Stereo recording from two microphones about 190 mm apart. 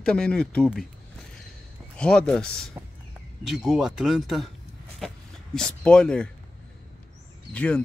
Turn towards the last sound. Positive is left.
turn(degrees=5)  # may be behind; listen again after turning